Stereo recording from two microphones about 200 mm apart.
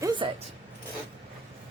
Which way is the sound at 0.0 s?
20° right (ahead or behind).